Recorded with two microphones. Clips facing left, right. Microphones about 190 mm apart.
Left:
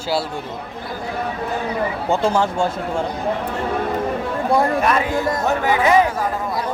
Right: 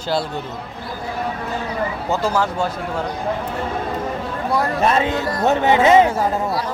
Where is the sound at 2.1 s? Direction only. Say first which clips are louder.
Left 2 dB; 25° left (ahead or behind).